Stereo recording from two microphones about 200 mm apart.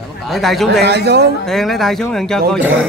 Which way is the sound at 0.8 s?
55° right (ahead or behind).